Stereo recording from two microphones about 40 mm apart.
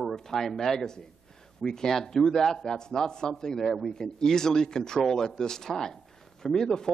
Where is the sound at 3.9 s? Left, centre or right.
Centre.